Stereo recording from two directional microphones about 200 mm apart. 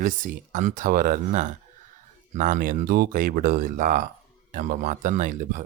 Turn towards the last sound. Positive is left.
turn(degrees=-40)  # may be behind; listen again after turning